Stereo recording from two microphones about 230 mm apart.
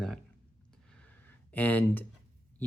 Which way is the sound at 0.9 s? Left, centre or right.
Centre.